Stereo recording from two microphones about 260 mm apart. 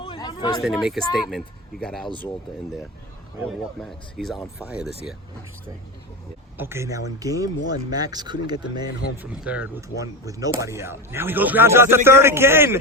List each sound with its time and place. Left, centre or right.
0.0 s a sound: centre
0.6 s speech: centre
3.4 s speech: centre
6.6 s speech: centre
8.9 s speech: left
9.1 s speech: centre